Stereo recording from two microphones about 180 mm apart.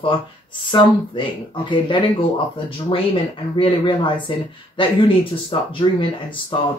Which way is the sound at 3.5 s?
25° left (ahead or behind).